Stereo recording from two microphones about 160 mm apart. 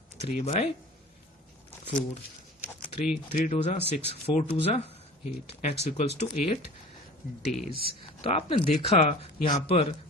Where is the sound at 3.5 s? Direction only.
40° left (ahead or behind).